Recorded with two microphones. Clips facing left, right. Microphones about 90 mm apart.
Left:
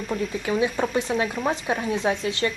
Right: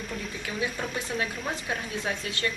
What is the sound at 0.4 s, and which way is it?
Speech, 30° left (ahead or behind).